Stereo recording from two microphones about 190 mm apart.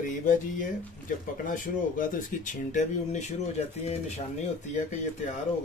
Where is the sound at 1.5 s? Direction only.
45° left (ahead or behind).